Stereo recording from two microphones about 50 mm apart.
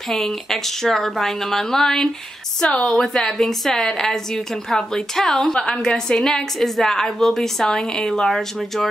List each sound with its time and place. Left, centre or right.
0.1 s a woman's voice: centre
2.9 s a woman's voice: centre